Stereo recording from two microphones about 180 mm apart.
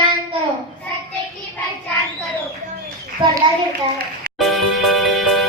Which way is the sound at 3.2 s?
25° right (ahead or behind).